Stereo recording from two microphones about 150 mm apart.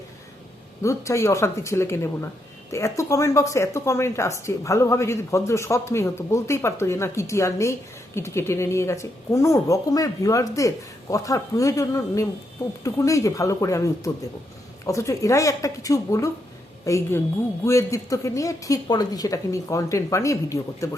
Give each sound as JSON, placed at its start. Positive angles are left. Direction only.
{"t": 0.8, "sound": "speech", "side_deg": 20}